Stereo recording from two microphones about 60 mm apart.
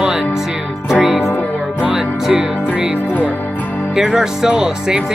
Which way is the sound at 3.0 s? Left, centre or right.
Left.